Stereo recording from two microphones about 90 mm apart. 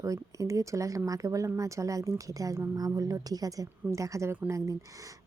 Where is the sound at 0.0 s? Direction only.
40° right (ahead or behind).